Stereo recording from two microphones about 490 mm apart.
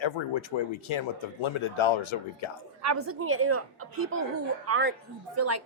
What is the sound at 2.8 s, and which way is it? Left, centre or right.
A woman's voice, right.